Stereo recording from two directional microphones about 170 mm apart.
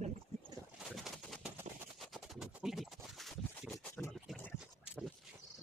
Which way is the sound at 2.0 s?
Centre (ahead or behind).